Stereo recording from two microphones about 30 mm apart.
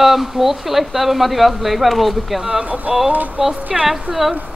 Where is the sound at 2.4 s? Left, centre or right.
Centre.